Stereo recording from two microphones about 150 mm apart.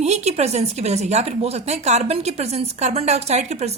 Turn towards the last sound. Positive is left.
turn(degrees=-45)  # may be behind; listen again after turning